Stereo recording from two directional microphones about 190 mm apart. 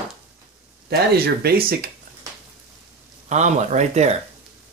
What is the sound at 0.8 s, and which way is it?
Speech, 55° right (ahead or behind).